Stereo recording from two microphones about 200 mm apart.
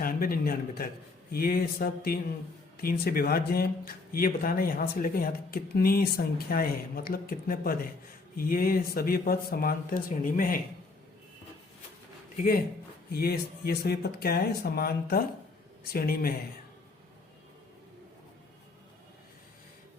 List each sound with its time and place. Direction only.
0.0 s speech: 45° left (ahead or behind)
13.1 s speech: 50° left (ahead or behind)